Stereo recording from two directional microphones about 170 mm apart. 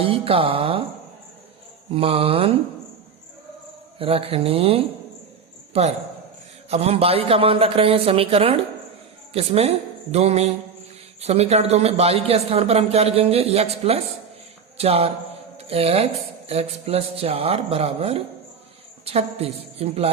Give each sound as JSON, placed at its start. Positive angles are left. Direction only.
{"t": 0.0, "sound": "speech", "side_deg": -30}
{"t": 1.9, "sound": "speech", "side_deg": -35}
{"t": 3.9, "sound": "speech", "side_deg": -35}
{"t": 6.7, "sound": "a woman's voice", "side_deg": -35}